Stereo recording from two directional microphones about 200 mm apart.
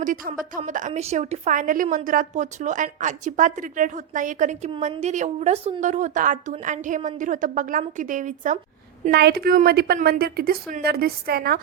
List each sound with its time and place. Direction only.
0.0 s a woman's voice: 40° right (ahead or behind)
9.0 s a woman's voice: 50° right (ahead or behind)